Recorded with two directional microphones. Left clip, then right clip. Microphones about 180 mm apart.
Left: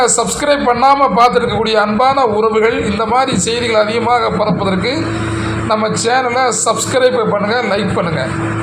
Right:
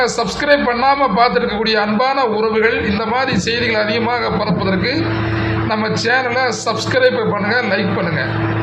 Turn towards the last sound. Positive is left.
turn(degrees=20)  # may be behind; listen again after turning